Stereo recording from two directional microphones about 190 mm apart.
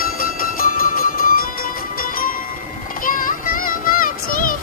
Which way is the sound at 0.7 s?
50° left (ahead or behind).